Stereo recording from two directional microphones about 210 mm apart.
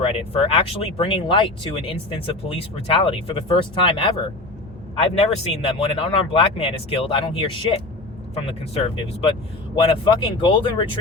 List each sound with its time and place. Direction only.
0.0 s speech: 25° left (ahead or behind)
5.1 s speech: 30° left (ahead or behind)